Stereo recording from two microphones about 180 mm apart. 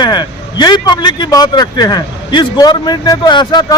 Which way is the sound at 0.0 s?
25° left (ahead or behind).